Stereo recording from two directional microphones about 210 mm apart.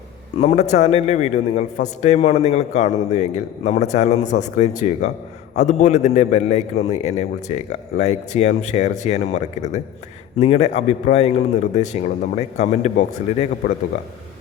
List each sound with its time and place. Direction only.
0.3 s a man's voice: 30° left (ahead or behind)